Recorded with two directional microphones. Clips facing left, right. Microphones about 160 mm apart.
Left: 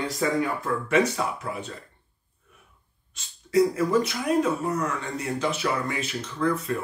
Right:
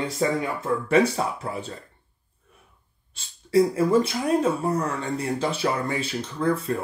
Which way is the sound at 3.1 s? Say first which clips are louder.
Right 5 dB; 30° right (ahead or behind).